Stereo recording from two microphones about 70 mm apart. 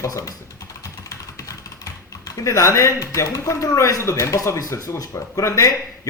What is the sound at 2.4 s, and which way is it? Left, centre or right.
A man's voice, left.